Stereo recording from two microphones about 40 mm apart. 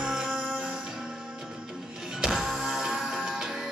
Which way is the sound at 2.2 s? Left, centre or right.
Centre.